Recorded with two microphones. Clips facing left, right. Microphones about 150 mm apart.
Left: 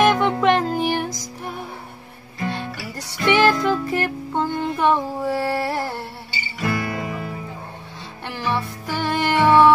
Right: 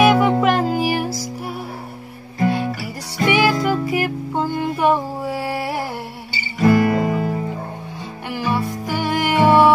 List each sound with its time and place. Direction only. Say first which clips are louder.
0.0 s music: right 3 dB; 10° right (ahead or behind)
3.3 s music: even; 10° right (ahead or behind)
6.6 s guitar: right 10 dB; 35° right (ahead or behind)
8.3 s music: right 3 dB; 10° right (ahead or behind)